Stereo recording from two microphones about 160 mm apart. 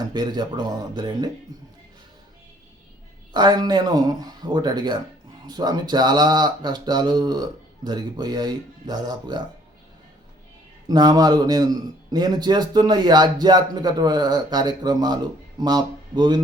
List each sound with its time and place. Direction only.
0.0 s a man's voice: 25° right (ahead or behind)
3.3 s a man's voice: 25° right (ahead or behind)
10.8 s a man's voice: 25° right (ahead or behind)